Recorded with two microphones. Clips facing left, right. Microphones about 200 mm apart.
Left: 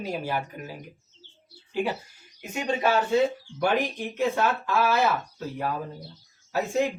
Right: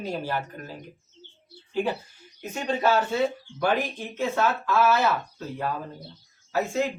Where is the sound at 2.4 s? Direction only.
15° left (ahead or behind).